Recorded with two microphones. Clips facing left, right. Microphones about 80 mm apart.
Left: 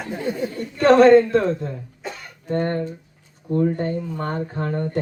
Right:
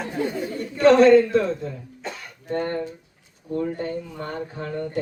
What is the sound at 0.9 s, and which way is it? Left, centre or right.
Speech, left.